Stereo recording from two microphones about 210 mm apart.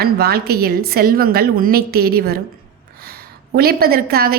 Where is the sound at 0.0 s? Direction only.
45° right (ahead or behind).